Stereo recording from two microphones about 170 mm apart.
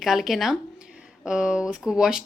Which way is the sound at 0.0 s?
Centre (ahead or behind).